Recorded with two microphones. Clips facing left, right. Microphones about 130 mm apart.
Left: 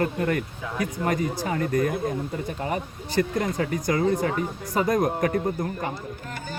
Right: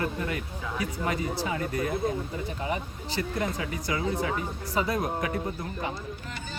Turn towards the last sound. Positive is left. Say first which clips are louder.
# left 6 dB
turn(degrees=50)  # may be behind; listen again after turning